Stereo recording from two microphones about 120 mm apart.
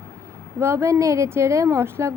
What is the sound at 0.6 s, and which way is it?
Speech, 20° right (ahead or behind).